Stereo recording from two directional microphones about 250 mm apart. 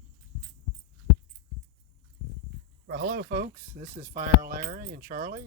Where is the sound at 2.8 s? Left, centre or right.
Right.